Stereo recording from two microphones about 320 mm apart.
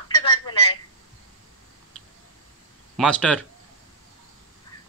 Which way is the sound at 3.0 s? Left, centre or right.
Centre.